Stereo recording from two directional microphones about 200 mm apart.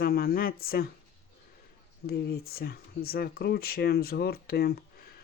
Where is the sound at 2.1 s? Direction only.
50° left (ahead or behind).